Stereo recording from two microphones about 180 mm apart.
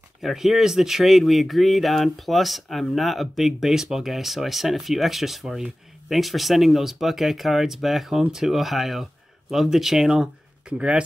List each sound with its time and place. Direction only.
0.2 s speech: centre (ahead or behind)